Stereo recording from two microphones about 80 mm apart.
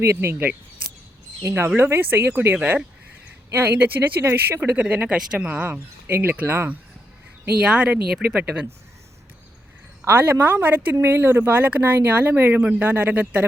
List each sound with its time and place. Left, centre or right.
0.0 s speech: right
4.2 s speech: right
7.6 s speech: centre
10.0 s speech: right